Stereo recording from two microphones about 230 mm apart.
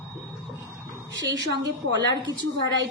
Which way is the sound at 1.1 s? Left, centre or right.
Right.